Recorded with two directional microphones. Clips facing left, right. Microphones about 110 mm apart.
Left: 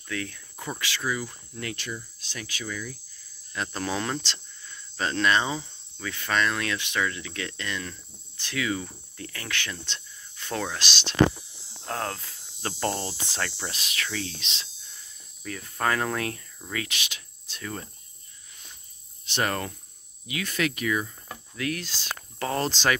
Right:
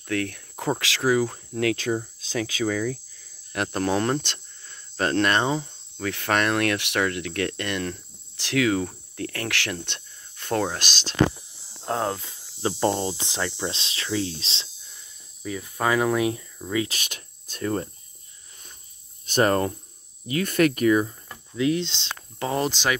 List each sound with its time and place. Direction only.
0.0 s speech: 60° right (ahead or behind); by 2.9 s 80° right
3.5 s speech: 50° right (ahead or behind)
8.4 s speech: 85° right; by 11.1 s 45° right (ahead or behind)
11.8 s cricket: 20° right (ahead or behind)
15.4 s speech: 10° right (ahead or behind)
16.9 s speech: 45° right (ahead or behind)
19.2 s cricket: 40° right (ahead or behind)
20.2 s speech: 45° right (ahead or behind)
21.5 s cricket: 25° right (ahead or behind)